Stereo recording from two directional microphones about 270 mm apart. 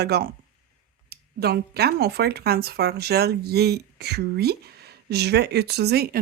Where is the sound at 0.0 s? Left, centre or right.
Right.